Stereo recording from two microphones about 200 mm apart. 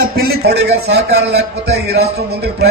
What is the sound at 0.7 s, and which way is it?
A man's voice, 55° right (ahead or behind).